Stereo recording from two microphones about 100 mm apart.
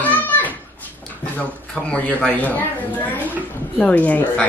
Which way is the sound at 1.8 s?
10° left (ahead or behind).